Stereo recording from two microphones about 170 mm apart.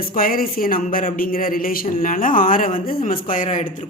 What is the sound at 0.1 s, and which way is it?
Speech, 60° left (ahead or behind).